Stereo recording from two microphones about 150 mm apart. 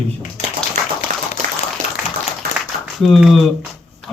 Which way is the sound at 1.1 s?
55° right (ahead or behind).